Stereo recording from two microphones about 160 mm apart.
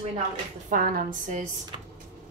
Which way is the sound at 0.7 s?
65° right (ahead or behind).